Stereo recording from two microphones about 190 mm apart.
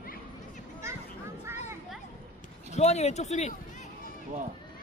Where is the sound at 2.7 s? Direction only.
35° left (ahead or behind).